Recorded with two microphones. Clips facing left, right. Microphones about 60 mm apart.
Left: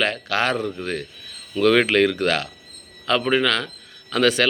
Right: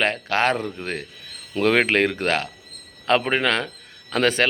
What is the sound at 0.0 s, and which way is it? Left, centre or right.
A man's voice, right.